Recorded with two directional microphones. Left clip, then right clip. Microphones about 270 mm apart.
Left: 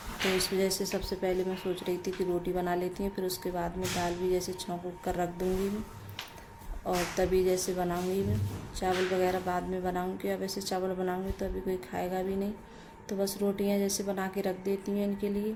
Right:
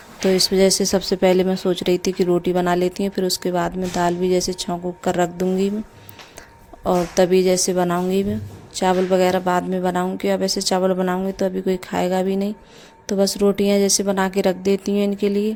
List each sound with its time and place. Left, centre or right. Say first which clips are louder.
0.3 s speech: right 16 dB; right
6.8 s speech: right 13 dB; right